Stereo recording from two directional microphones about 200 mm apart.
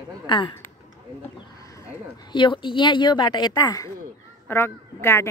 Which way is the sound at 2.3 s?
25° left (ahead or behind).